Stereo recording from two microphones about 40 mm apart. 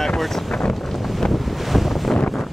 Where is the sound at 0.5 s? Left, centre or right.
Centre.